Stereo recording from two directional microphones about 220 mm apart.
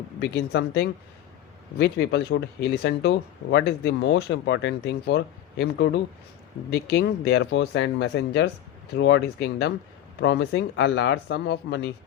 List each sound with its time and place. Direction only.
0.2 s speech: 50° left (ahead or behind)